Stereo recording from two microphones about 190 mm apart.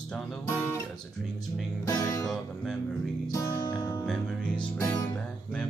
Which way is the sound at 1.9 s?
15° left (ahead or behind).